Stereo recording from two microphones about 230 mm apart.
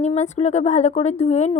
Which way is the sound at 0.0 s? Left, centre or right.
Left.